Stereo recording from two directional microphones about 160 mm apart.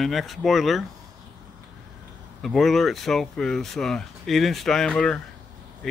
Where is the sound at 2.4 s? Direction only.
Centre (ahead or behind).